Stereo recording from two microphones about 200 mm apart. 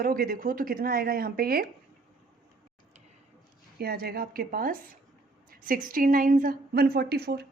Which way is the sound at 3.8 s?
50° right (ahead or behind).